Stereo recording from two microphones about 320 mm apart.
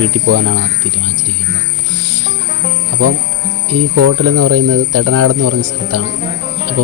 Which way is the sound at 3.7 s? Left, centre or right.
Right.